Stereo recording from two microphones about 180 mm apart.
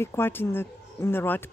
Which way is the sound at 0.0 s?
15° left (ahead or behind).